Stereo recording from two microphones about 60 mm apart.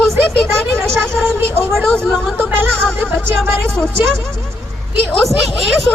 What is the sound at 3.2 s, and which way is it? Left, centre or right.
Speech, right.